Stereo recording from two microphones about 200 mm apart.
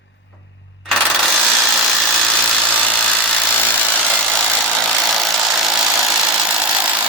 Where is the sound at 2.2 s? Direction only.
5° left (ahead or behind).